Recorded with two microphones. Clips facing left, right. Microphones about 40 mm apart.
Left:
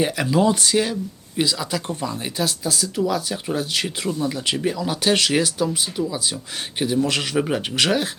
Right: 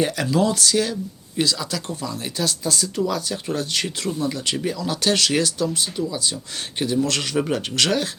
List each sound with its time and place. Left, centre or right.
0.0 s speech: centre
1.9 s speech: left